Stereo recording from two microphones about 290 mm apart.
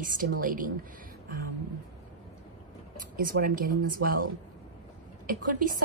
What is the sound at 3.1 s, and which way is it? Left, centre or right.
Speech, right.